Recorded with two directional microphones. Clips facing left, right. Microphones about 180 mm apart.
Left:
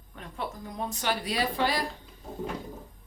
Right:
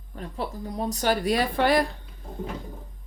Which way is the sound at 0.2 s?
35° right (ahead or behind).